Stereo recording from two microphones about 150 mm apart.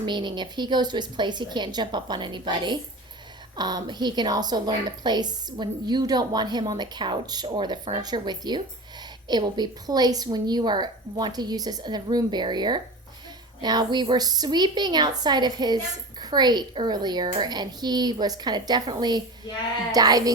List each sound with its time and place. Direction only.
0.0 s a woman's voice: 30° right (ahead or behind)